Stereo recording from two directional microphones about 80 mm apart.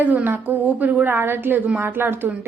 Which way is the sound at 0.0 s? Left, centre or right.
Right.